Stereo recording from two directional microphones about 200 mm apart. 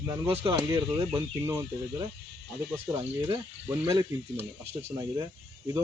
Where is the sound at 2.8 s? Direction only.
15° right (ahead or behind).